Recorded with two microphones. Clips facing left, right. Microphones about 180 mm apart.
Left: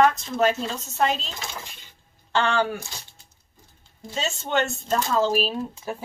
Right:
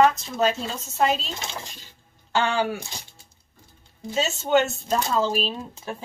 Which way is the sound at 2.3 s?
5° right (ahead or behind).